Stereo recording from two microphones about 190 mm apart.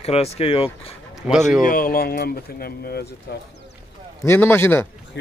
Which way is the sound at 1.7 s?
50° left (ahead or behind).